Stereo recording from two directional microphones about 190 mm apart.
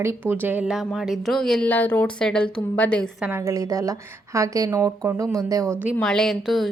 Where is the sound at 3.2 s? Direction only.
15° right (ahead or behind).